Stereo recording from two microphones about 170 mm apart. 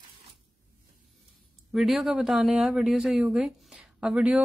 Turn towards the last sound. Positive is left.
turn(degrees=-5)  # may be behind; listen again after turning